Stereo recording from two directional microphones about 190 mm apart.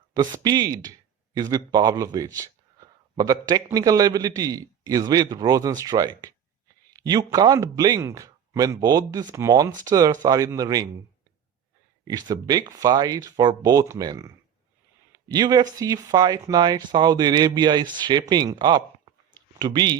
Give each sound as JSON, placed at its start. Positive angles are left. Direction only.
{"t": 0.2, "sound": "speech", "side_deg": -20}
{"t": 12.0, "sound": "speech", "side_deg": -20}
{"t": 19.5, "sound": "speech", "side_deg": -20}